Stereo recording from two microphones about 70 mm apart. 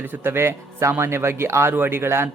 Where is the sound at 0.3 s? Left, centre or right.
Right.